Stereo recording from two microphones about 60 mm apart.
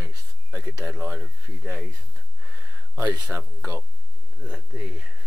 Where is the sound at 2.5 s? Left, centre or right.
Right.